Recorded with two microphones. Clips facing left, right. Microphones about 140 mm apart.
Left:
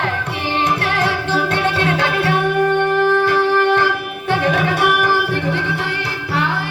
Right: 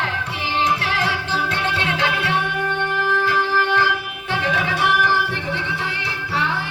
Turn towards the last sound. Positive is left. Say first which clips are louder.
# left 5 dB
turn(degrees=65)  # may be behind; listen again after turning